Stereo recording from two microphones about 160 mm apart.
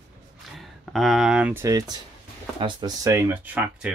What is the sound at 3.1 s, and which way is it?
Speech, 10° right (ahead or behind).